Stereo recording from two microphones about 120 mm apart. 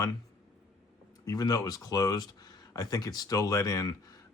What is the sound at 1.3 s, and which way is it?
Speech, 30° left (ahead or behind).